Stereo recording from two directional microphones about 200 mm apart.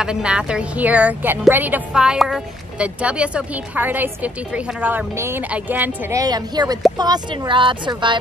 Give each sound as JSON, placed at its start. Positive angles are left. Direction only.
{"t": 0.0, "sound": "speech", "side_deg": -5}